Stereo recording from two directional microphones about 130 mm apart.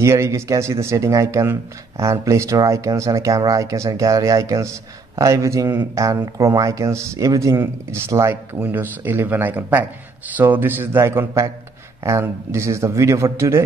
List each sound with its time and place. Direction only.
0.0 s speech: 20° right (ahead or behind)